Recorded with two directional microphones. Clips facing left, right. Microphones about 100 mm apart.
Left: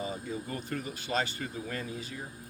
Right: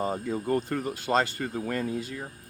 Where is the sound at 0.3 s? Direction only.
60° right (ahead or behind).